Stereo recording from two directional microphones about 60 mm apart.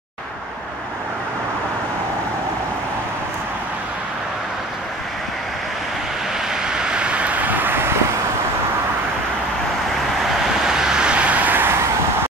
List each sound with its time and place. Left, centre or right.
6.7 s vehicle: centre; by 7.9 s right
10.6 s vehicle: centre; by 11.8 s right